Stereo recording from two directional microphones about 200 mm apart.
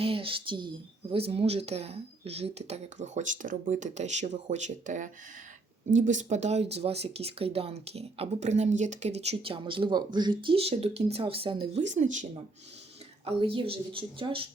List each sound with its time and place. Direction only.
0.0 s speech: 25° right (ahead or behind)
13.2 s a woman's voice: 30° right (ahead or behind)